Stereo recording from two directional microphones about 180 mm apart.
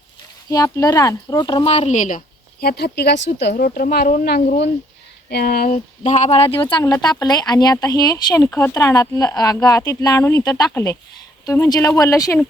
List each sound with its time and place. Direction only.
0.5 s speech: 20° left (ahead or behind); by 3.5 s 75° left (ahead or behind)
3.5 s speech: 55° left (ahead or behind)
5.3 s speech: 60° left (ahead or behind); by 12.4 s 15° left (ahead or behind)